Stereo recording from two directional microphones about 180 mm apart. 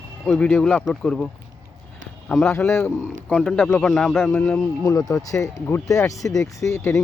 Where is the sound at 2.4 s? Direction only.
15° left (ahead or behind); by 4.3 s centre (ahead or behind).